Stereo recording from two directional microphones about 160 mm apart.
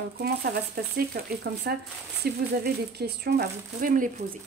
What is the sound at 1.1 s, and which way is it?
Speech, 75° right (ahead or behind).